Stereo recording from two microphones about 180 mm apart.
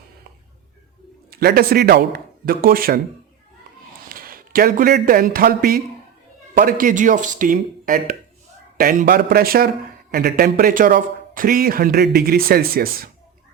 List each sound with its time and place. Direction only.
1.3 s speech: 60° right (ahead or behind)
4.1 s speech: 55° right (ahead or behind)